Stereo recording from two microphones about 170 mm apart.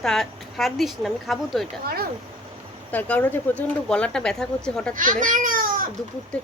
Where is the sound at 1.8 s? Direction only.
65° right (ahead or behind).